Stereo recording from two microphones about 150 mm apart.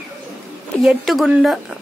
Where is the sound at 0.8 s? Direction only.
Centre (ahead or behind).